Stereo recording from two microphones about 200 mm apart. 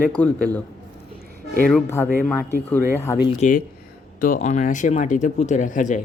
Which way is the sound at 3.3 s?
40° left (ahead or behind).